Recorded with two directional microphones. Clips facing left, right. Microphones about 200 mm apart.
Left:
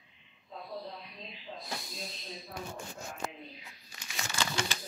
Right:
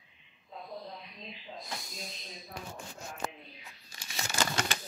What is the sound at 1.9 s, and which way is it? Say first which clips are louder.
Speech: left 2 dB; centre (ahead or behind).